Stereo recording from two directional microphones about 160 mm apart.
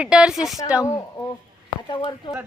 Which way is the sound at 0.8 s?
20° left (ahead or behind).